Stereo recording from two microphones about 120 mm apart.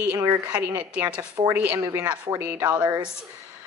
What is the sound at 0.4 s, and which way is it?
Speech, 15° right (ahead or behind).